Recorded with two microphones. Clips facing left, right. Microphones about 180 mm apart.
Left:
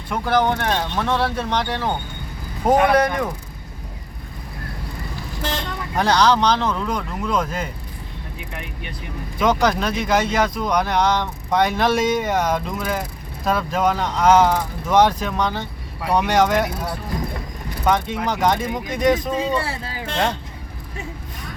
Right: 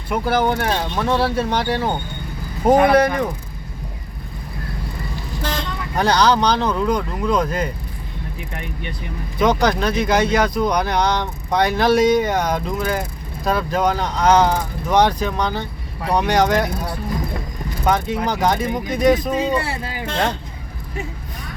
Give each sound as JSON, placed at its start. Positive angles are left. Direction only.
{"t": 0.1, "sound": "speech", "side_deg": -5}
{"t": 6.0, "sound": "speech", "side_deg": 0}
{"t": 9.4, "sound": "speech", "side_deg": 0}
{"t": 18.3, "sound": "speech", "side_deg": 0}